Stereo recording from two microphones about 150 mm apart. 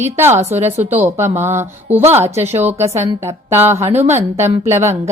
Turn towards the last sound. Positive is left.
turn(degrees=-20)  # may be behind; listen again after turning